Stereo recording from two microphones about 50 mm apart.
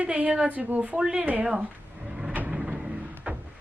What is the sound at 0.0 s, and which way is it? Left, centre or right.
Speech, right.